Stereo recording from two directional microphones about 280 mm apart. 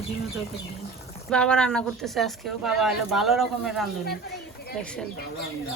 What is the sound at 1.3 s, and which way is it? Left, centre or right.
Speech, centre.